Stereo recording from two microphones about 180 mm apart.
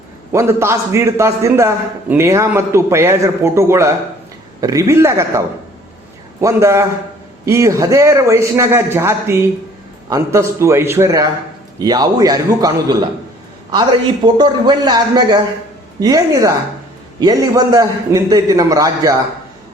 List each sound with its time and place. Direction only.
0.3 s a man's voice: 15° right (ahead or behind)
6.4 s a man's voice: 15° right (ahead or behind)
14.3 s a man's voice: 25° right (ahead or behind)